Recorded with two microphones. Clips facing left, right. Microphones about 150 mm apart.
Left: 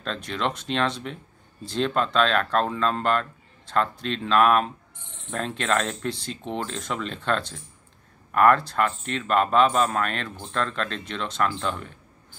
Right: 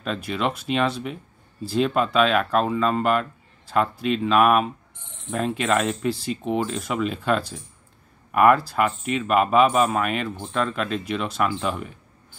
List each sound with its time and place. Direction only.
0.0 s speech: 5° right (ahead or behind)